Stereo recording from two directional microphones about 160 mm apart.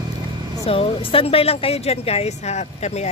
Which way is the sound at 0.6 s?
35° left (ahead or behind).